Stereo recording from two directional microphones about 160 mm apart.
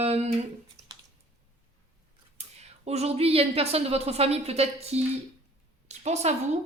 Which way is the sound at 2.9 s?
40° right (ahead or behind).